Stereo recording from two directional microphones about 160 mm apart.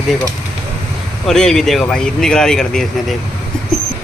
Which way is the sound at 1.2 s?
5° left (ahead or behind).